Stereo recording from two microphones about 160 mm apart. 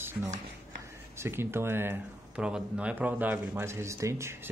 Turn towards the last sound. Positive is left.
turn(degrees=-15)  # may be behind; listen again after turning